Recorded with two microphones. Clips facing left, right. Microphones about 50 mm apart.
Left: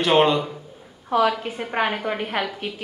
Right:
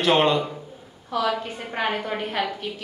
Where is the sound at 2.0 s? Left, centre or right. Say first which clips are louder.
Left 2 dB; centre.